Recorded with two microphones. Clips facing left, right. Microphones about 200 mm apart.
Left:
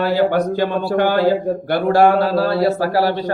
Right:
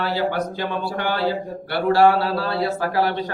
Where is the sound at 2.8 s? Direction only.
35° left (ahead or behind).